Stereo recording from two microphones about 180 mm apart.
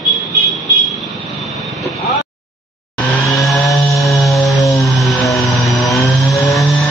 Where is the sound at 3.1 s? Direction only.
5° left (ahead or behind).